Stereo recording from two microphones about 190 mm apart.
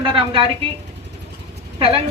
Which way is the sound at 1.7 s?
30° right (ahead or behind).